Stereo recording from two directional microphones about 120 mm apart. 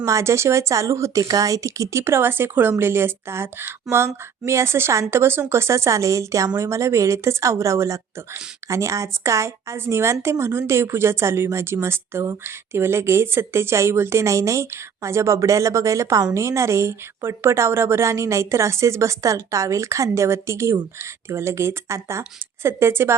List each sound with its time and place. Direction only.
0.0 s a woman's voice: 25° right (ahead or behind)